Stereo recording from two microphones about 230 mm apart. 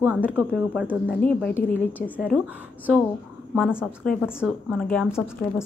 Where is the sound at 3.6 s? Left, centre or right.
Centre.